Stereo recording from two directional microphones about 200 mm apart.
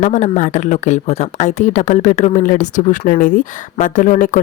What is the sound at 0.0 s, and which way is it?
A woman's voice, 35° left (ahead or behind).